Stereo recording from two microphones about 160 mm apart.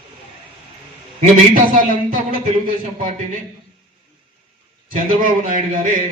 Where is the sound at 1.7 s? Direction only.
55° right (ahead or behind).